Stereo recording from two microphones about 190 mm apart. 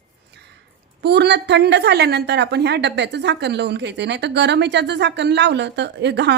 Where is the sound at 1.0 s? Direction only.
60° right (ahead or behind).